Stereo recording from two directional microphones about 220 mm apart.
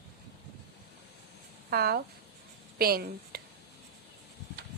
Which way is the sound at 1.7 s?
45° right (ahead or behind).